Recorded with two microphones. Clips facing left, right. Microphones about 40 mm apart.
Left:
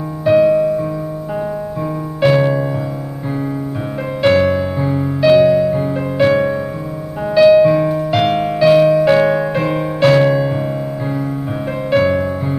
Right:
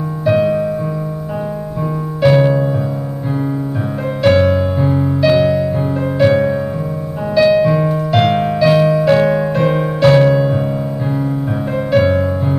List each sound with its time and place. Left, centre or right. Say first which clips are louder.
0.2 s music: left 3 dB; centre
2.2 s music: right 1 dB; centre
4.2 s music: right 1 dB; centre
5.3 s keyboard: left 6 dB; centre
7.3 s music: left 3 dB; centre
11.9 s music: right 1 dB; centre